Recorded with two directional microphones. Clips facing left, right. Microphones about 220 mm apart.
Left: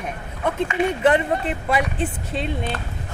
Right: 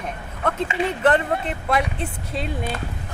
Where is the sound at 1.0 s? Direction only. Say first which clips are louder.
Even; 10° left (ahead or behind); by 2.8 s 5° right (ahead or behind).